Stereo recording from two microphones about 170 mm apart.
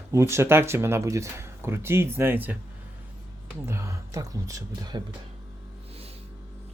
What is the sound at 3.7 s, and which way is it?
Speech, 15° right (ahead or behind).